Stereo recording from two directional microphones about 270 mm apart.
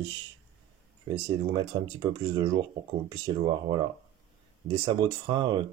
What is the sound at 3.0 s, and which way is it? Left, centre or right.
Speech, centre.